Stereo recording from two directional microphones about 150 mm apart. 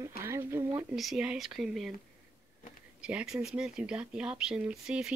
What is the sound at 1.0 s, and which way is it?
Speech, 5° right (ahead or behind).